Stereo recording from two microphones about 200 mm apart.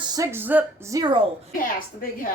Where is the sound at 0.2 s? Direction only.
10° right (ahead or behind).